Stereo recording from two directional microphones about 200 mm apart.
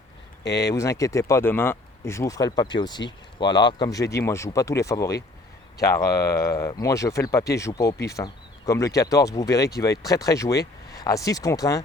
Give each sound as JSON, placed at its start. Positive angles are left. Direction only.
{"t": 0.4, "sound": "speech", "side_deg": 55}
{"t": 0.7, "sound": "speech", "side_deg": 15}